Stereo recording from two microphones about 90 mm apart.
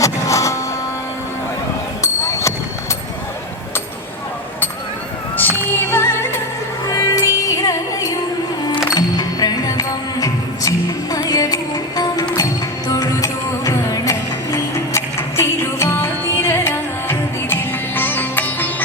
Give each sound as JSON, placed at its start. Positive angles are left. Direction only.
{"t": 0.0, "sound": "printer", "side_deg": 35}
{"t": 2.0, "sound": "a sound", "side_deg": 35}
{"t": 5.4, "sound": "music", "side_deg": 25}
{"t": 6.8, "sound": "music", "side_deg": 35}